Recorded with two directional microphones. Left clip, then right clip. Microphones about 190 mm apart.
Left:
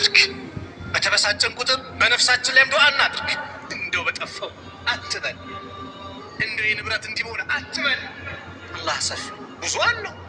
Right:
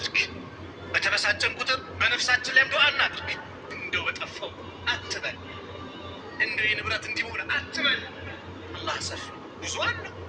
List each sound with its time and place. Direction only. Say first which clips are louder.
0.0 s music: left 10 dB; 30° left (ahead or behind)
0.9 s a man's voice: left 5 dB; 25° left (ahead or behind)
3.7 s music: left 4 dB; 40° left (ahead or behind)
4.9 s speech: left 4 dB; 35° left (ahead or behind)
6.3 s a man's voice: left 2 dB; 25° left (ahead or behind)
8.7 s speech: left 6 dB; 40° left (ahead or behind)